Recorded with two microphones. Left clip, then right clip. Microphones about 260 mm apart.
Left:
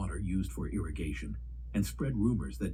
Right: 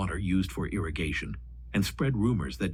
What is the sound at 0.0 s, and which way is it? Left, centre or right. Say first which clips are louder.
Speech: right 8 dB; right.